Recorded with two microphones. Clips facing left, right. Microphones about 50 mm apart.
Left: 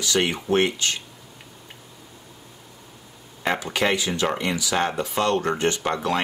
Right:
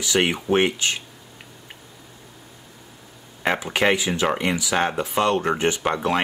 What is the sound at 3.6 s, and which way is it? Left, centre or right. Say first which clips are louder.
Speech: right 4 dB; centre.